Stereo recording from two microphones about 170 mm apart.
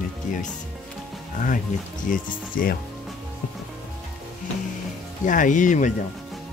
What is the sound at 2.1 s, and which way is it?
Speech, 55° left (ahead or behind).